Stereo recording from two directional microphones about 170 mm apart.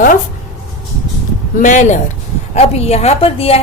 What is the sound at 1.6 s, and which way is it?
Speech, 50° left (ahead or behind).